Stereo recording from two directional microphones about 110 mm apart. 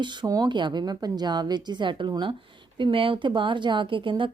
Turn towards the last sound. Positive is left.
turn(degrees=-50)  # may be behind; listen again after turning